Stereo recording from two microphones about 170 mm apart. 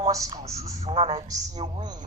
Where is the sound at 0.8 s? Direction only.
35° right (ahead or behind).